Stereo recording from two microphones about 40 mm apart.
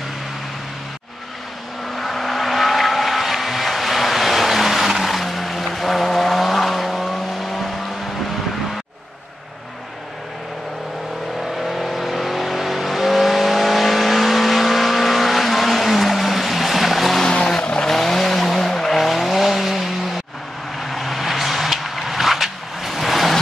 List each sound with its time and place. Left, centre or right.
2.0 s vehicle: centre
11.6 s vehicle: centre
17.2 s vehicle: centre
17.6 s vehicle: left
17.8 s vehicle: centre